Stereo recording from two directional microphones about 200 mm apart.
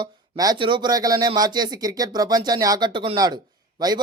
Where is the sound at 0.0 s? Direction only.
20° right (ahead or behind).